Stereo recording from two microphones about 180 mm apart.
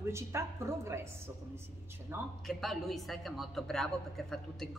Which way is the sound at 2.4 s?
Centre (ahead or behind).